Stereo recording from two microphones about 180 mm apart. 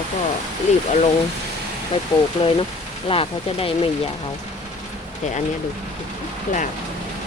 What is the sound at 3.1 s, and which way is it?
Speech, 30° left (ahead or behind).